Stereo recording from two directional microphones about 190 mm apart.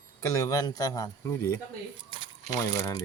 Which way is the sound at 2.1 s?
30° right (ahead or behind).